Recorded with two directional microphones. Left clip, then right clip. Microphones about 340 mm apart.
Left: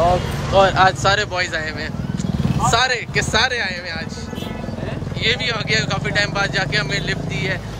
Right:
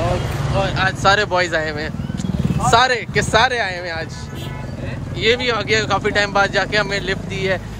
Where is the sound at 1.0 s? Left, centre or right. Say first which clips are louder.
Right 3 dB; centre.